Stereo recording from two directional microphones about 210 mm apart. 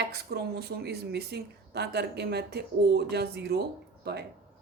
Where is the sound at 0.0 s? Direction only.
50° right (ahead or behind).